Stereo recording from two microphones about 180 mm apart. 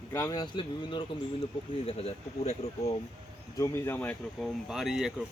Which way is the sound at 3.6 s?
15° left (ahead or behind).